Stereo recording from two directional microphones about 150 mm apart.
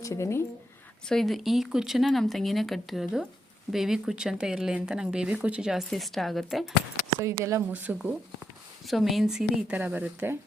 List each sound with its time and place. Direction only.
0.0 s speech: 20° left (ahead or behind)
1.0 s speech: centre (ahead or behind)
7.2 s speech: 20° right (ahead or behind)